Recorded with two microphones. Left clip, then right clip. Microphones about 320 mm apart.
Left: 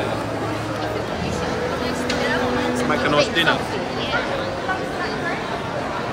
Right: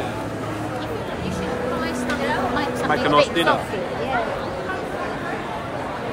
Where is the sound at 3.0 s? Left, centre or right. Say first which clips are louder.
Right 1 dB; right.